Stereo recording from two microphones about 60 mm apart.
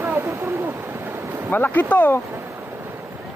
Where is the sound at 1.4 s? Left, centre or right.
Left.